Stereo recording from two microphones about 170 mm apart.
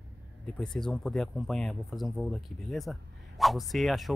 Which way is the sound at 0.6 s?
5° left (ahead or behind).